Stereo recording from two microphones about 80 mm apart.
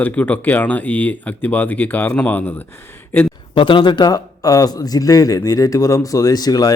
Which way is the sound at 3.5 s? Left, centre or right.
Left.